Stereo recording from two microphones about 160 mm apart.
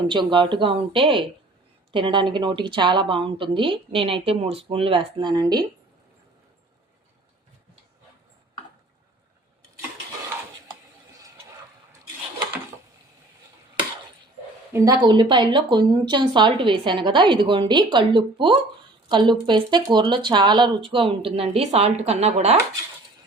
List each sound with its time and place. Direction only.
0.0 s speech: 30° right (ahead or behind)
14.7 s speech: 25° right (ahead or behind); by 22.5 s 40° right (ahead or behind)